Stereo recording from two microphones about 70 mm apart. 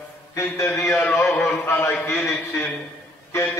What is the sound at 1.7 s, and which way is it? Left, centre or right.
Speech, left.